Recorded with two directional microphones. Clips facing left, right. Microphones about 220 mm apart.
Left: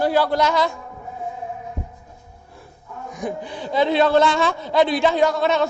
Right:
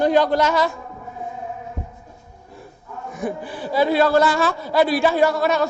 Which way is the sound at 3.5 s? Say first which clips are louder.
Even; 5° right (ahead or behind).